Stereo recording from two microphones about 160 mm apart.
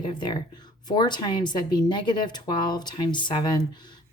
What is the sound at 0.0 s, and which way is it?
A woman's voice, 30° left (ahead or behind).